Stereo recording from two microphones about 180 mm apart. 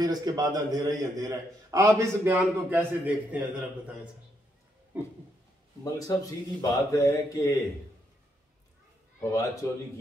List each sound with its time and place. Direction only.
0.0 s a man's voice: 20° right (ahead or behind)
5.9 s a man's voice: 20° left (ahead or behind)
9.2 s a man's voice: 20° left (ahead or behind)